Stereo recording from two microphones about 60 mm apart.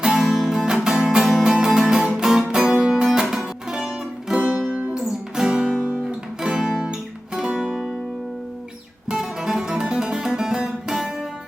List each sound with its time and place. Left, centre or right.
0.0 s music: centre
4.4 s music: right
5.8 s guitar: centre
7.3 s music: centre
9.0 s music: centre